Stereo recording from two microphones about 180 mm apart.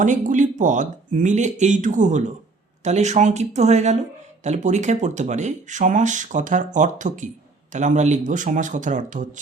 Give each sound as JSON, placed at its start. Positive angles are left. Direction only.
{"t": 0.0, "sound": "speech", "side_deg": -45}